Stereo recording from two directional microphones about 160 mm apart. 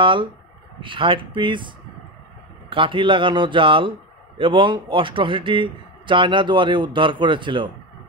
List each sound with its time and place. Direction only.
0.0 s a man's voice: 30° right (ahead or behind)
2.7 s a man's voice: 30° right (ahead or behind)